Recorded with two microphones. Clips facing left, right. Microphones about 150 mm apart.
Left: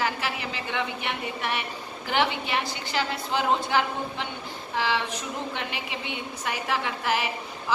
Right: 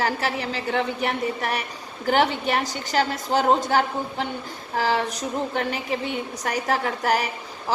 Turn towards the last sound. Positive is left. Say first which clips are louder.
# right 1 dB
turn(degrees=-40)  # may be behind; listen again after turning